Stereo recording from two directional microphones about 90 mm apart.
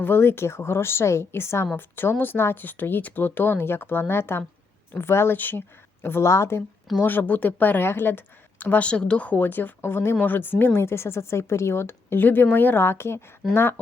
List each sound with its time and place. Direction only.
0.0 s speech: 25° left (ahead or behind)
7.0 s speech: 20° left (ahead or behind)